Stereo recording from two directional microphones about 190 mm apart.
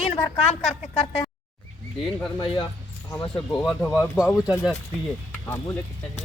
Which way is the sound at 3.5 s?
5° left (ahead or behind).